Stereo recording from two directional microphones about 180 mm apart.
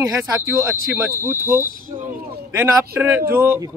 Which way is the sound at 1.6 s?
50° right (ahead or behind).